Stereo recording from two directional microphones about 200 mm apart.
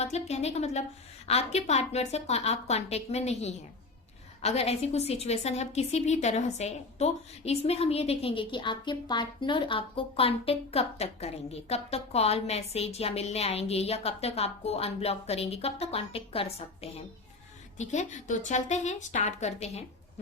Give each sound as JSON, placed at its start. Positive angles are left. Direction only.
{"t": 0.0, "sound": "a woman's voice", "side_deg": 35}